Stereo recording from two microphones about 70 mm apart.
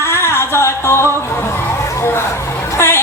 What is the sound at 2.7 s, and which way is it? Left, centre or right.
Music, left.